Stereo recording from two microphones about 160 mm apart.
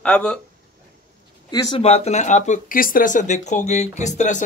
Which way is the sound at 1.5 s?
25° left (ahead or behind).